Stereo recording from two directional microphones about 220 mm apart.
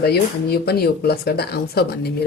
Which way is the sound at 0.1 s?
45° left (ahead or behind).